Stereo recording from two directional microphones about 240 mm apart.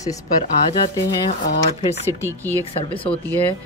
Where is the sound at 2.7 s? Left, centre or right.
Left.